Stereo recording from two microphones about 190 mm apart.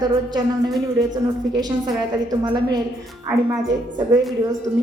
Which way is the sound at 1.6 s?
20° right (ahead or behind).